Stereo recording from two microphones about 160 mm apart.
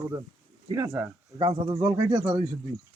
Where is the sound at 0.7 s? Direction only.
15° right (ahead or behind).